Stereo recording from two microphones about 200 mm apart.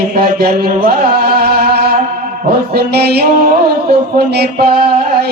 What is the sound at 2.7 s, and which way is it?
Speech, 50° right (ahead or behind).